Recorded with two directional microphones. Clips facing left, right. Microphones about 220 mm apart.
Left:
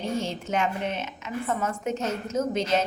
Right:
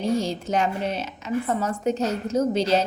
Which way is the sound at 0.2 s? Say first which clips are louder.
Right 3 dB; 35° right (ahead or behind).